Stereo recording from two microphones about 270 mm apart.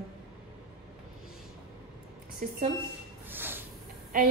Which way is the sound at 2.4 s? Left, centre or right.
Right.